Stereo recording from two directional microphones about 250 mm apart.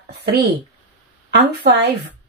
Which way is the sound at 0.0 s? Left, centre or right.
Right.